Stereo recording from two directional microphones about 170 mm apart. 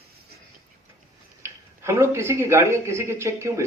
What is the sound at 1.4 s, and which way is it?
Speech, 15° right (ahead or behind).